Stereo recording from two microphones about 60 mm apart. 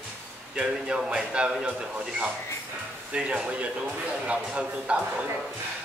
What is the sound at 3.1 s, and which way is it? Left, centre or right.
A man's voice, centre.